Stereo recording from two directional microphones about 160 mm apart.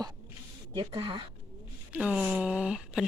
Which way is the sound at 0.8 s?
30° right (ahead or behind).